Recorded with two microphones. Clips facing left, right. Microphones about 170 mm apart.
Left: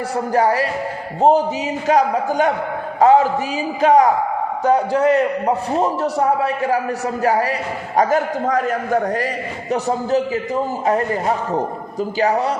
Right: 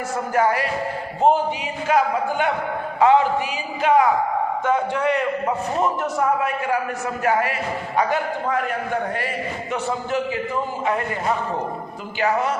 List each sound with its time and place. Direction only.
0.3 s a man's voice: 35° left (ahead or behind)